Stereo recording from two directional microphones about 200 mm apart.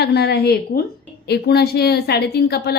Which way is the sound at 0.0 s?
55° left (ahead or behind).